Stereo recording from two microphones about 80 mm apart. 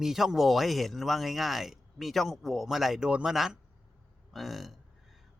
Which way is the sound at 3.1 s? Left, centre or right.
Centre.